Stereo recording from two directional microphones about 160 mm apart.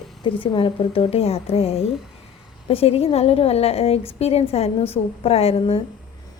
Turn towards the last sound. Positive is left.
turn(degrees=35)  # may be behind; listen again after turning